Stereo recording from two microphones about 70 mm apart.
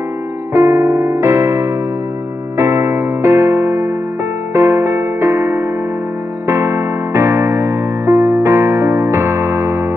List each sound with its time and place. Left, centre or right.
0.6 s electric piano: right
2.5 s music: right